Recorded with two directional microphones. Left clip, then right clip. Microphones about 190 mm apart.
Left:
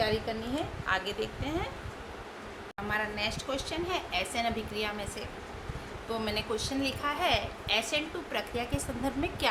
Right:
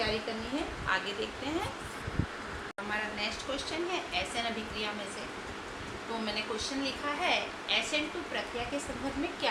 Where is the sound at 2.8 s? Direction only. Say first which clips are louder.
Left 3 dB; 40° left (ahead or behind).